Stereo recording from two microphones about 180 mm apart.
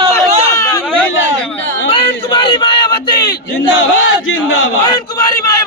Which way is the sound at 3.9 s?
90° left.